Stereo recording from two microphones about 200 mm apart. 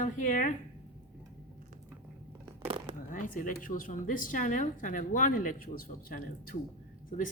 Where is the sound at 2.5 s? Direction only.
30° right (ahead or behind).